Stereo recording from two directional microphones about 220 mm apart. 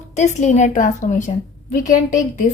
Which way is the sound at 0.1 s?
30° left (ahead or behind).